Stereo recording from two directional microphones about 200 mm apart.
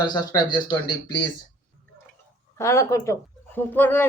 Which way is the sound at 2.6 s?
15° left (ahead or behind).